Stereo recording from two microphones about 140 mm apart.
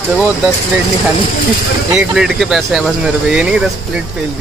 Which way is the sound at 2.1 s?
5° right (ahead or behind).